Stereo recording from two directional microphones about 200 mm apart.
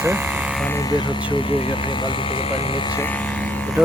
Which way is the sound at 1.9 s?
25° left (ahead or behind).